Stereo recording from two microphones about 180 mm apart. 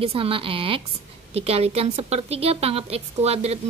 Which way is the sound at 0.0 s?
30° right (ahead or behind).